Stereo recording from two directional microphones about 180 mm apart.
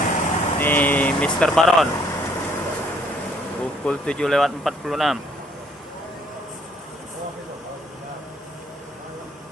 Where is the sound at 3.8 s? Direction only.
5° left (ahead or behind).